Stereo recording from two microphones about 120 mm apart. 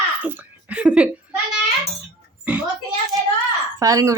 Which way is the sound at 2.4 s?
10° right (ahead or behind).